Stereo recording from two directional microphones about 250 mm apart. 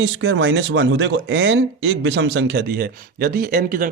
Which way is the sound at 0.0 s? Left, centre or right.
Right.